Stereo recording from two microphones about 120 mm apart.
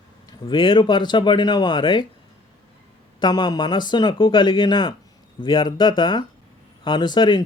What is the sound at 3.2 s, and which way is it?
A man's voice, 35° left (ahead or behind).